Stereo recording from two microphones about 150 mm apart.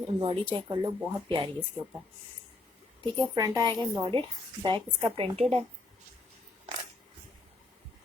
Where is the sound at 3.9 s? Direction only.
30° right (ahead or behind).